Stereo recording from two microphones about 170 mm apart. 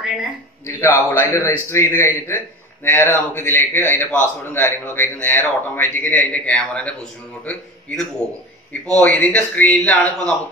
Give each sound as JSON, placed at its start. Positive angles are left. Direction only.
{"t": 0.7, "sound": "a man's voice", "side_deg": 15}